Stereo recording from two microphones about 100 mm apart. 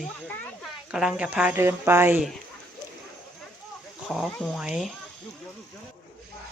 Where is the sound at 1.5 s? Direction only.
25° right (ahead or behind).